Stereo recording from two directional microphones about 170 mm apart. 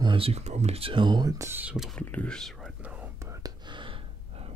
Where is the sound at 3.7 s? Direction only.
30° right (ahead or behind).